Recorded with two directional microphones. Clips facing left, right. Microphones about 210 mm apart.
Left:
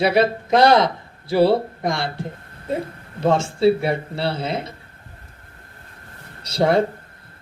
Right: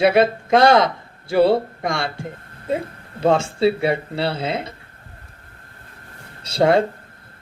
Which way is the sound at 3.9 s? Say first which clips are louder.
Right 1 dB; 60° right (ahead or behind).